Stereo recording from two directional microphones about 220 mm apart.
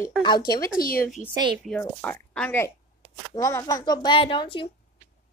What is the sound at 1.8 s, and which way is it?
A child's voice, 10° left (ahead or behind).